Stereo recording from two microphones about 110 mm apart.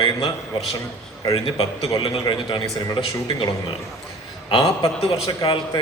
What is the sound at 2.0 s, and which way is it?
Speech, 45° left (ahead or behind).